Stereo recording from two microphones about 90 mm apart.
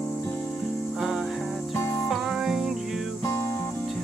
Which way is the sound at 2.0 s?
5° right (ahead or behind).